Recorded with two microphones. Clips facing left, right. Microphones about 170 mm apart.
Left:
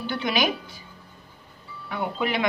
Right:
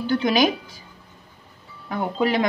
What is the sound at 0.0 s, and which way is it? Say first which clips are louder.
Speech: right 6 dB; 40° right (ahead or behind).